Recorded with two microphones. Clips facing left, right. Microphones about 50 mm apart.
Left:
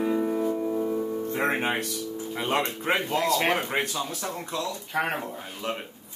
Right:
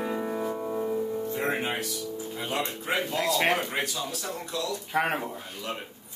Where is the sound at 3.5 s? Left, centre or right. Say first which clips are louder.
Left 2 dB; left.